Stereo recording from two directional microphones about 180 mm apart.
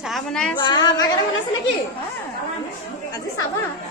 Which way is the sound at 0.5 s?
25° left (ahead or behind).